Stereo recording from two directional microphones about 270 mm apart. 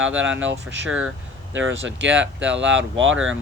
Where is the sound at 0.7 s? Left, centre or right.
Right.